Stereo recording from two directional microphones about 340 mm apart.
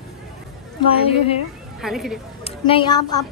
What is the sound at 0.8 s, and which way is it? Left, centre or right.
Speech, centre.